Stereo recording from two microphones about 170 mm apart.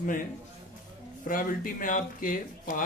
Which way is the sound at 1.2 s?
55° left (ahead or behind).